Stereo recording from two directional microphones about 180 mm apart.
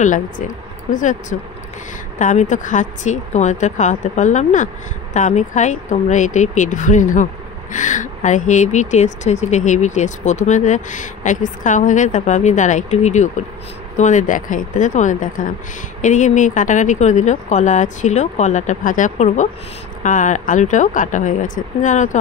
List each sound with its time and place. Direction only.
0.0 s speech: 45° left (ahead or behind)